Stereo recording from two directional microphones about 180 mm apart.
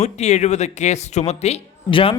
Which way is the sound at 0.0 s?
40° left (ahead or behind).